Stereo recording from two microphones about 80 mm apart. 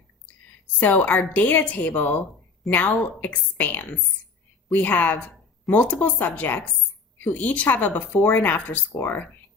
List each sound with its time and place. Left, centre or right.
0.8 s speech: left